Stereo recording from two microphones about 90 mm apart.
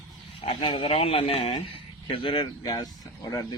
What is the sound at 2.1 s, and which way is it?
Speech, 65° left (ahead or behind).